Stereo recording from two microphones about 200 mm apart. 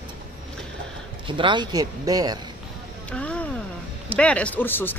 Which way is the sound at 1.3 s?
25° right (ahead or behind).